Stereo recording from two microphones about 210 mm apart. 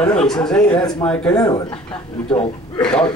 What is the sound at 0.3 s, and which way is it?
A man's voice, 5° left (ahead or behind).